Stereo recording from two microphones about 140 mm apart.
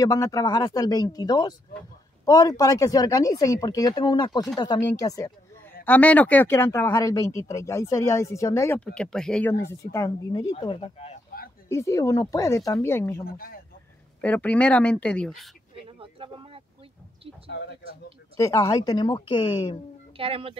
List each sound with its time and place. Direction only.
0.0 s speech: 25° left (ahead or behind)
5.9 s speech: 10° left (ahead or behind)
8.8 s speech: 5° left (ahead or behind)
9.5 s speech: 20° left (ahead or behind)
10.8 s speech: 45° left (ahead or behind)
11.7 s speech: 20° left (ahead or behind)
13.2 s speech: 90° left
14.2 s speech: 10° left (ahead or behind)
15.8 s a sound: 40° right (ahead or behind)
18.3 s speech: 25° left (ahead or behind)
20.2 s speech: 40° right (ahead or behind)